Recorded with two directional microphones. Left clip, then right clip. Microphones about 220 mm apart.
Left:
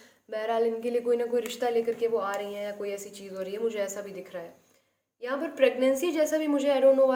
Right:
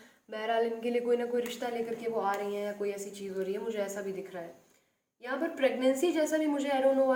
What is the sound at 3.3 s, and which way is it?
Speech, 45° left (ahead or behind).